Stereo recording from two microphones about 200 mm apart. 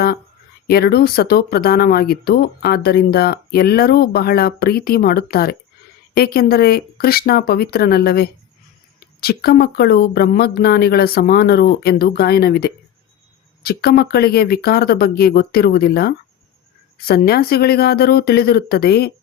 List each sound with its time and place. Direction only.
0.7 s speech: 50° left (ahead or behind)